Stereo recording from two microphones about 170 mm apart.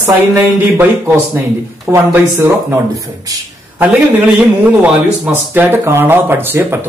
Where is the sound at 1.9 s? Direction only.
15° right (ahead or behind).